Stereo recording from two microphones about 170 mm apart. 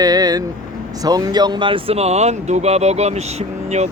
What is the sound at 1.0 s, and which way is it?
Speech, 25° right (ahead or behind).